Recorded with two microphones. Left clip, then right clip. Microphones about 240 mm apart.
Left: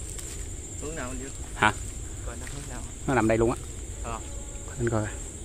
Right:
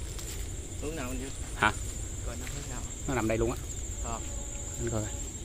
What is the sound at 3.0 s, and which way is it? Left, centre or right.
Speech, left.